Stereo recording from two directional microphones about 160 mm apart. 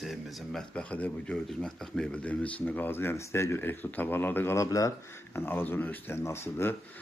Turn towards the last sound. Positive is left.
turn(degrees=15)  # may be behind; listen again after turning